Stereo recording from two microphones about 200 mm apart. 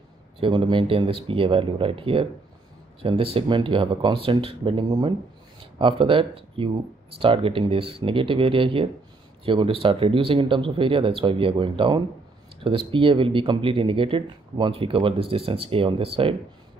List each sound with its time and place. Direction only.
0.4 s speech: 25° right (ahead or behind)